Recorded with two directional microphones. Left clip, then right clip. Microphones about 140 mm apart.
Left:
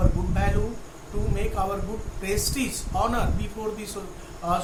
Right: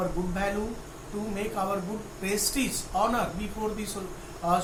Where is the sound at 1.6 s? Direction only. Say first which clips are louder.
Left 1 dB; 20° left (ahead or behind).